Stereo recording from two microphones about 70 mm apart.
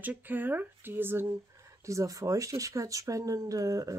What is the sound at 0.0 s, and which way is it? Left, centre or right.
Speech, right.